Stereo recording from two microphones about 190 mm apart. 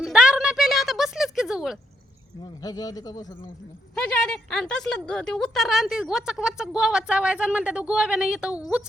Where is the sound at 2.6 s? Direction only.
20° left (ahead or behind).